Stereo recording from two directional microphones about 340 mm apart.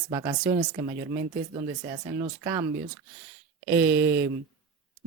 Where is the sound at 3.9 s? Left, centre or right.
Right.